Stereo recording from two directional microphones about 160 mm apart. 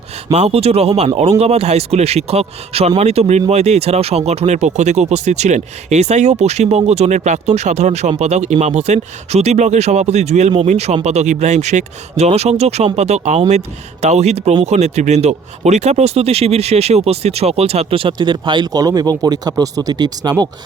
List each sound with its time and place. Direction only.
0.3 s speech: 40° right (ahead or behind); by 20.3 s 25° right (ahead or behind)